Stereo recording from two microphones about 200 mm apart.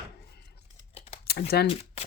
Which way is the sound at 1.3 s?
50° left (ahead or behind).